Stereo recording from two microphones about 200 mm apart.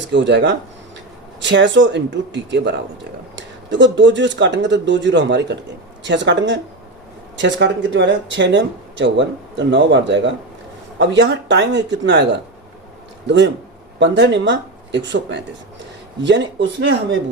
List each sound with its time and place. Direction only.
0.1 s speech: 65° right (ahead or behind)